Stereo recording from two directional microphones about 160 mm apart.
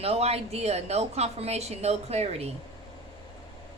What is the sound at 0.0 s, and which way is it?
A woman's voice, 40° right (ahead or behind).